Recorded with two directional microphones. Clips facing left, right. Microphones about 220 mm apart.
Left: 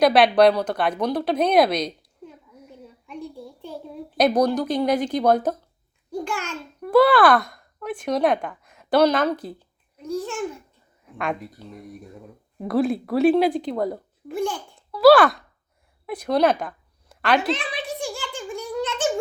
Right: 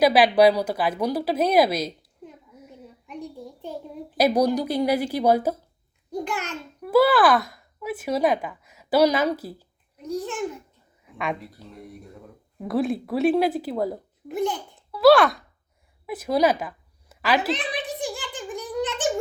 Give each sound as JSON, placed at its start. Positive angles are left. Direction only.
{"t": 0.0, "sound": "speech", "side_deg": -5}
{"t": 4.2, "sound": "a woman's voice", "side_deg": -10}
{"t": 6.1, "sound": "a child's voice", "side_deg": -20}
{"t": 6.8, "sound": "speech", "side_deg": -5}
{"t": 10.0, "sound": "a woman's voice", "side_deg": -20}
{"t": 11.0, "sound": "a sound", "side_deg": 0}
{"t": 12.6, "sound": "speech", "side_deg": 0}
{"t": 14.3, "sound": "a child's voice", "side_deg": -20}
{"t": 14.8, "sound": "babbling", "side_deg": 0}
{"t": 16.0, "sound": "a woman's voice", "side_deg": -5}
{"t": 17.5, "sound": "giggle", "side_deg": -15}